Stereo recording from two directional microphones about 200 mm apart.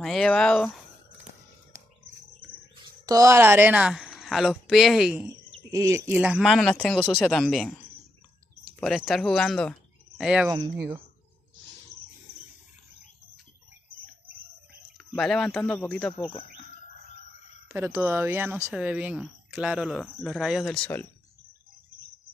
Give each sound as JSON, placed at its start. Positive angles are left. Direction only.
{"t": 0.0, "sound": "speech", "side_deg": 0}
{"t": 2.7, "sound": "speech", "side_deg": -15}
{"t": 5.7, "sound": "speech", "side_deg": -15}
{"t": 8.7, "sound": "speech", "side_deg": 0}
{"t": 15.0, "sound": "speech", "side_deg": 5}
{"t": 16.2, "sound": "speech", "side_deg": 25}
{"t": 17.7, "sound": "speech", "side_deg": -10}